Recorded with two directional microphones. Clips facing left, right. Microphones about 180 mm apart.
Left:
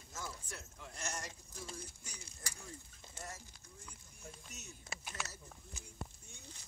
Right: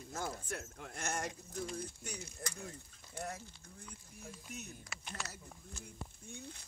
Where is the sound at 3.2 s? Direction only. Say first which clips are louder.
Right 7 dB; 60° right (ahead or behind).